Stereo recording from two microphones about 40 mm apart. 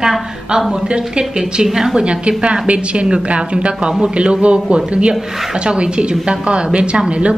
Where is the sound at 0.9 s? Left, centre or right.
Right.